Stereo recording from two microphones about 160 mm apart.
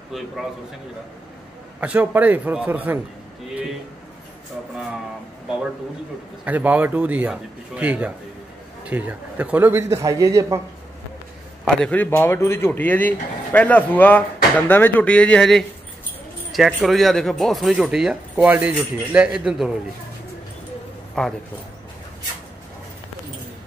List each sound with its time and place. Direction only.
1.8 s a man's voice: 10° right (ahead or behind)
6.4 s a man's voice: 10° right (ahead or behind)
11.6 s a man's voice: 5° left (ahead or behind)
21.2 s speech: 5° left (ahead or behind)